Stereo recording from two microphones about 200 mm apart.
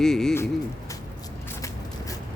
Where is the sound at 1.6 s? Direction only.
15° left (ahead or behind).